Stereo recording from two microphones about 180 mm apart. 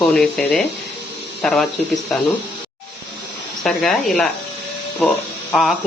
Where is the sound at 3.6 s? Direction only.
Centre (ahead or behind).